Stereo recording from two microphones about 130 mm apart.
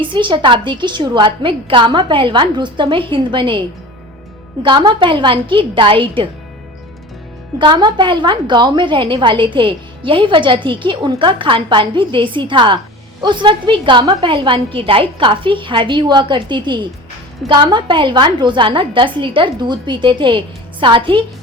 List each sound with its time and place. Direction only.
0.0 s a woman's voice: 40° right (ahead or behind)
4.6 s a woman's voice: 40° right (ahead or behind)
7.6 s a woman's voice: 35° right (ahead or behind)